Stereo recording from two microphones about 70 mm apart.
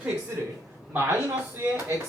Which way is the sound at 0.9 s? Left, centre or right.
Right.